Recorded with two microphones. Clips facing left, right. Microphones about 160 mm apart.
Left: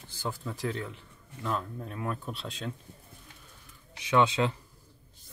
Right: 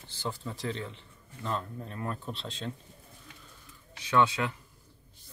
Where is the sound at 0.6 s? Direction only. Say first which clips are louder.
Left 2 dB; 5° left (ahead or behind).